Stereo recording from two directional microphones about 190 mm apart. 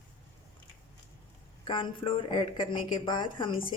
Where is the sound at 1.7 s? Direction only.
25° left (ahead or behind).